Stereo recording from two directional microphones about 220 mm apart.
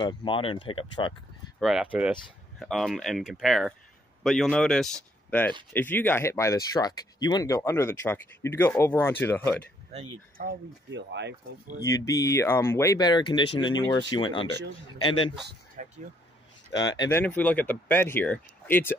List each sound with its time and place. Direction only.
0.0 s speech: 20° left (ahead or behind)
1.6 s speech: 5° right (ahead or behind)
9.9 s speech: 40° right (ahead or behind)
11.8 s speech: 15° left (ahead or behind)
15.4 s speech: 40° right (ahead or behind)
16.7 s speech: 20° left (ahead or behind)